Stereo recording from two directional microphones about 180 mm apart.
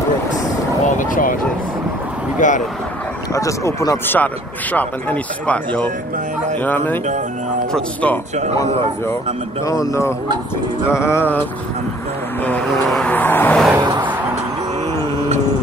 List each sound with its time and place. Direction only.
0.8 s vehicle: 45° left (ahead or behind)
2.4 s speech: 45° left (ahead or behind)
3.3 s speech: 15° left (ahead or behind)
9.7 s speech: 15° left (ahead or behind)
12.4 s vehicle: 5° left (ahead or behind)
13.7 s vehicle: 25° right (ahead or behind)